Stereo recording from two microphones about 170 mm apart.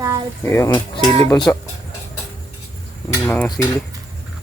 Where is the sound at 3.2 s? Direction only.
10° left (ahead or behind).